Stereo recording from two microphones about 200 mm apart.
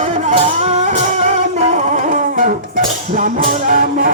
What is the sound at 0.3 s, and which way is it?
Music, 35° right (ahead or behind).